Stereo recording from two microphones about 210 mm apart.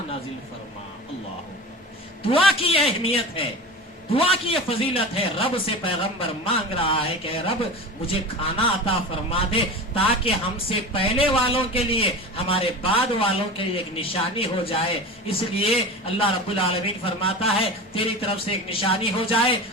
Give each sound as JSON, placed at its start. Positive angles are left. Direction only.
{"t": 2.2, "sound": "a man's voice", "side_deg": 25}